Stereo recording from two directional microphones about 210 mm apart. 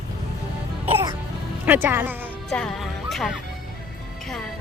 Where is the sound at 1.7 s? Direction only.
10° right (ahead or behind).